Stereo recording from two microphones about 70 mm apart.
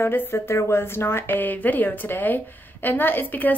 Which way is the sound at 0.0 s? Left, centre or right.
Left.